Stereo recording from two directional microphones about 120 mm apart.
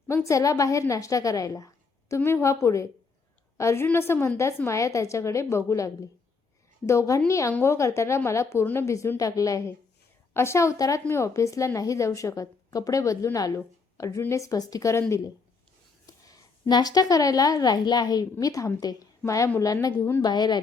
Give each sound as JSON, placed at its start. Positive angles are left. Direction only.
{"t": 0.1, "sound": "a woman's voice", "side_deg": 25}
{"t": 16.0, "sound": "a woman's voice", "side_deg": 35}
{"t": 20.2, "sound": "a woman's voice", "side_deg": 35}